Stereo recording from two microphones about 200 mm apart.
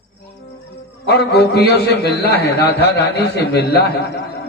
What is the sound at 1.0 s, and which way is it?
A man's voice, 55° left (ahead or behind).